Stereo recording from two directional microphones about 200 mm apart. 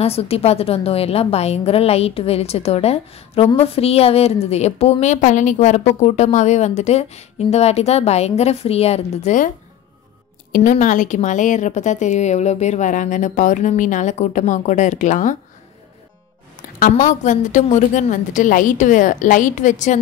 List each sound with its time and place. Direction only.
0.0 s a woman's voice: 30° left (ahead or behind)
10.5 s a woman's voice: 40° left (ahead or behind)
16.8 s a woman's voice: 35° left (ahead or behind)